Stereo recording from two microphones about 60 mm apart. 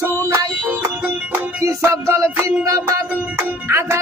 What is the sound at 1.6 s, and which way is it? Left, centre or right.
Music, right.